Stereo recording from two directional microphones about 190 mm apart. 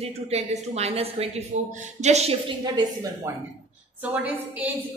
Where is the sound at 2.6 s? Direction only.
20° right (ahead or behind).